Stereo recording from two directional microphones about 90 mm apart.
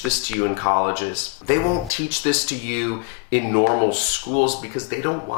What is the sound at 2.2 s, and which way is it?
Speech, 15° left (ahead or behind).